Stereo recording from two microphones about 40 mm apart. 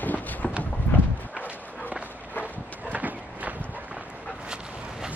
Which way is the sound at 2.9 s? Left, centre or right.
Right.